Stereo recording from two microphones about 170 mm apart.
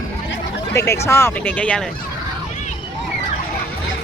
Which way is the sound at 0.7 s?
15° left (ahead or behind).